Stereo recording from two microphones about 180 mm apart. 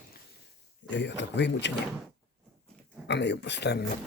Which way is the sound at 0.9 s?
80° left.